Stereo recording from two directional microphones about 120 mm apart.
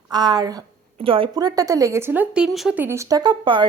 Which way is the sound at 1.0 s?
50° right (ahead or behind).